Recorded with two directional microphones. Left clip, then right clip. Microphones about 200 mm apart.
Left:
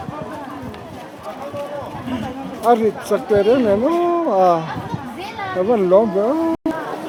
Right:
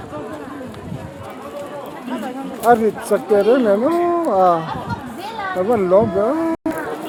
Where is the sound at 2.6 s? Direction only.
Centre (ahead or behind).